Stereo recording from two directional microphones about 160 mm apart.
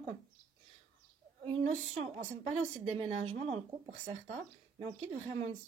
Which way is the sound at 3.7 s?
25° right (ahead or behind).